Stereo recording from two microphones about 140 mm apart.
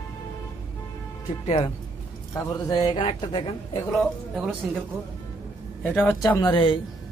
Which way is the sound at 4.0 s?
Centre (ahead or behind).